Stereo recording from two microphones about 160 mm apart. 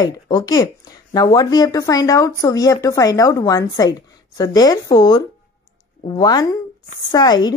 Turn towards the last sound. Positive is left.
turn(degrees=25)  # may be behind; listen again after turning